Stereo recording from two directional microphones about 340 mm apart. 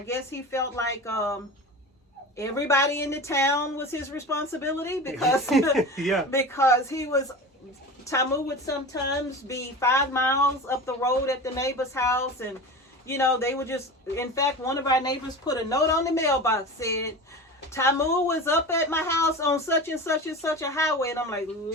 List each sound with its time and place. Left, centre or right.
0.0 s a woman's voice: centre